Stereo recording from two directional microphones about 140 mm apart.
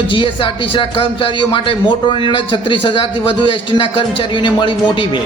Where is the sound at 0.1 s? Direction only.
40° left (ahead or behind).